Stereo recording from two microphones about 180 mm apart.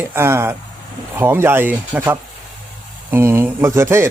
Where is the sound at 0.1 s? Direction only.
15° right (ahead or behind).